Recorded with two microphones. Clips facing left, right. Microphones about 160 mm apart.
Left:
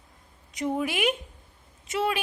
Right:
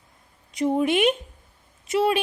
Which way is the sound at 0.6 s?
25° right (ahead or behind).